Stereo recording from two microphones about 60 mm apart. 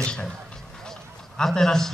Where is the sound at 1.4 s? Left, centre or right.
Centre.